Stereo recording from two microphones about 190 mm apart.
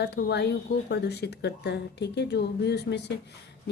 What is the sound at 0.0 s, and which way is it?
Speech, 60° left (ahead or behind).